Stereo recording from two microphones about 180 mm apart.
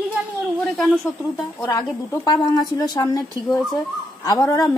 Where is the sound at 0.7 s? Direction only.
5° left (ahead or behind).